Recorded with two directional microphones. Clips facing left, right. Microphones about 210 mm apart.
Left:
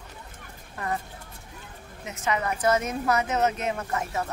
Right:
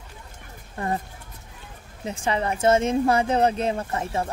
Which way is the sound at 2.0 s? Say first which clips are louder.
Right 3 dB; 30° right (ahead or behind).